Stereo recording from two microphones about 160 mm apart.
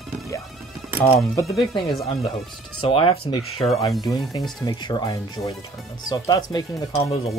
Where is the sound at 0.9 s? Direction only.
40° left (ahead or behind).